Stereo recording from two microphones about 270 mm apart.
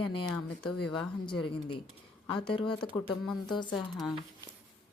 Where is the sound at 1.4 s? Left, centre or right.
Centre.